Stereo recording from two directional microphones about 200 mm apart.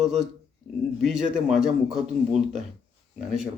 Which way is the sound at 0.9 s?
Centre (ahead or behind).